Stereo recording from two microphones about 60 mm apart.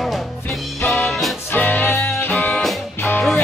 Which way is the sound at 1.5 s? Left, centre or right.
Left.